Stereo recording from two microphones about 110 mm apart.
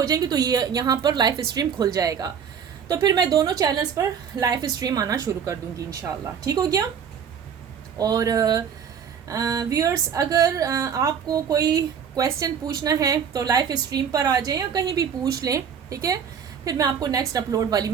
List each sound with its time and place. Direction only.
0.1 s a woman's voice: 35° right (ahead or behind)
7.9 s a woman's voice: 35° right (ahead or behind)